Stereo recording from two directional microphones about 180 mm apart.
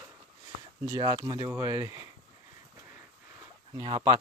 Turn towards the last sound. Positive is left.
turn(degrees=-25)  # may be behind; listen again after turning